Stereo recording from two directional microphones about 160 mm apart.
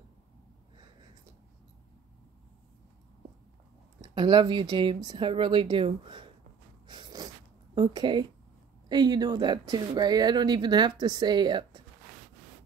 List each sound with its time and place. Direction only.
4.0 s speech: 25° right (ahead or behind)
6.9 s a sound: 25° right (ahead or behind)
7.7 s speech: 30° right (ahead or behind)